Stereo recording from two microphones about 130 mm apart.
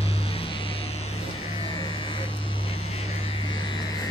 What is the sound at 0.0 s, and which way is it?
Vehicle, 45° left (ahead or behind).